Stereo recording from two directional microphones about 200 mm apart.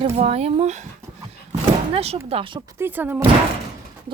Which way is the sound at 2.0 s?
30° right (ahead or behind).